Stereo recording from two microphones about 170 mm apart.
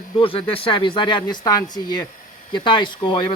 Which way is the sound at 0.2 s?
35° left (ahead or behind).